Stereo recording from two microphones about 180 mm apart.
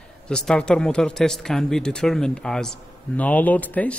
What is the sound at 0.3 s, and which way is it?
A man's voice, 5° left (ahead or behind).